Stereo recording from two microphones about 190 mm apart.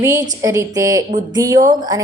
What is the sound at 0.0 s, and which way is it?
A woman's voice, 15° right (ahead or behind).